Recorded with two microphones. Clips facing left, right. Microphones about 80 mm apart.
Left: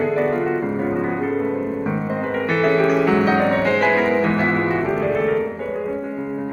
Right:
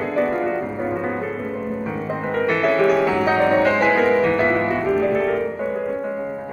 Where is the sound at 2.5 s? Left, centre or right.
Centre.